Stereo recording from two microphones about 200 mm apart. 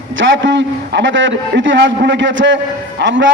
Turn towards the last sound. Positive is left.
turn(degrees=-65)  # may be behind; listen again after turning